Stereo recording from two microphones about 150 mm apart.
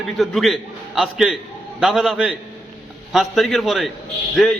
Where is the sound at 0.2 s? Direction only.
Centre (ahead or behind).